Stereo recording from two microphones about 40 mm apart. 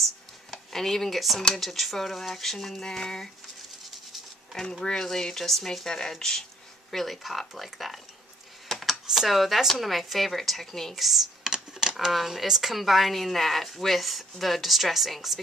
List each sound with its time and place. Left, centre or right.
0.0 s a sound: centre
1.5 s speech: centre
4.8 s speech: centre
8.6 s a sound: centre
9.1 s speech: centre
11.0 s speech: centre